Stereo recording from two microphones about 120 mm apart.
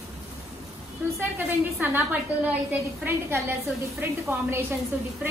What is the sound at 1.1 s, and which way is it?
A woman's voice, 15° right (ahead or behind).